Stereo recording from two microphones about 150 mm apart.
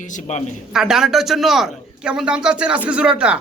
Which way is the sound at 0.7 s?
5° right (ahead or behind).